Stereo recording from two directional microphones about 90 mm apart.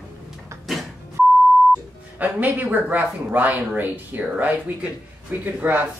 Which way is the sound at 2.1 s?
20° right (ahead or behind).